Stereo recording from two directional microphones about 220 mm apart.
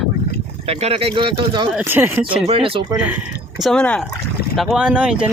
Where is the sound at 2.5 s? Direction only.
25° right (ahead or behind).